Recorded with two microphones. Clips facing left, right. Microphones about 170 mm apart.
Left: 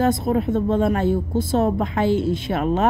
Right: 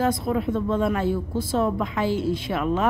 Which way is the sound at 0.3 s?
50° left (ahead or behind).